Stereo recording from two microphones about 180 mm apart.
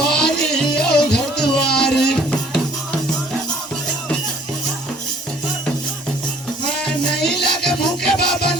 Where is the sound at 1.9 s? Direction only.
65° left (ahead or behind).